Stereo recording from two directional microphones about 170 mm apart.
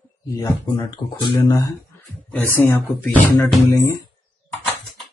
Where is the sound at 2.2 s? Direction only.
10° left (ahead or behind).